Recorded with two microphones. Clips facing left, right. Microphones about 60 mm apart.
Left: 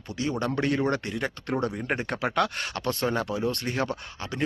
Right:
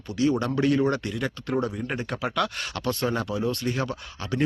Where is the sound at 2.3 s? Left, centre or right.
Left.